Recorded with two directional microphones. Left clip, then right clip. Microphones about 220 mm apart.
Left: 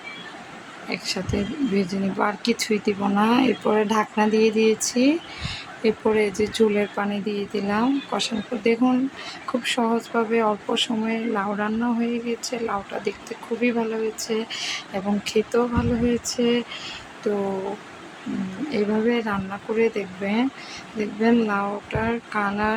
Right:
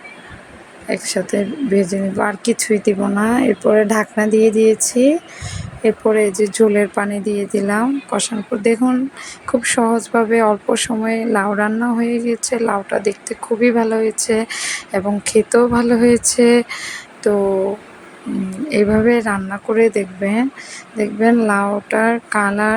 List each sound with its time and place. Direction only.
0.9 s speech: 15° right (ahead or behind)
18.7 s speech: 20° right (ahead or behind)